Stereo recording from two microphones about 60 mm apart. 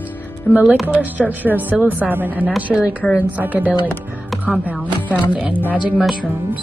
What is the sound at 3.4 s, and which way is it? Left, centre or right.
A woman's voice, right.